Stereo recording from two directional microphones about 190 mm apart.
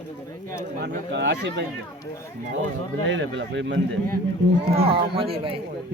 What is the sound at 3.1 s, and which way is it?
Speech, 75° right (ahead or behind).